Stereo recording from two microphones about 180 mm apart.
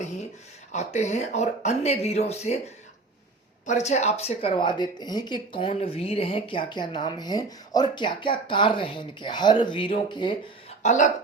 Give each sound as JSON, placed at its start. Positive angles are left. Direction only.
{"t": 0.7, "sound": "speech", "side_deg": 40}
{"t": 3.7, "sound": "speech", "side_deg": 40}
{"t": 10.8, "sound": "speech", "side_deg": 45}